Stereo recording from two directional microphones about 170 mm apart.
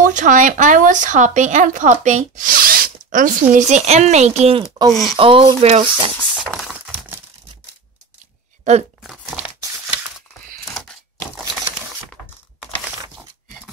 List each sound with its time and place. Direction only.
0.0 s a woman's voice: 50° right (ahead or behind); by 6.1 s 35° right (ahead or behind)
6.3 s a sound: centre (ahead or behind)
8.6 s speech: 45° right (ahead or behind)